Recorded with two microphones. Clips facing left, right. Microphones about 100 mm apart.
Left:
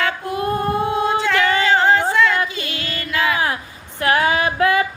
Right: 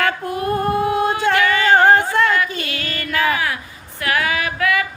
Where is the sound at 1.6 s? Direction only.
45° right (ahead or behind).